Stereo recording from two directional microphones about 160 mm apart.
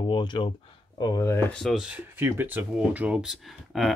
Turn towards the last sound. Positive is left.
turn(degrees=0)  # may be behind; listen again after turning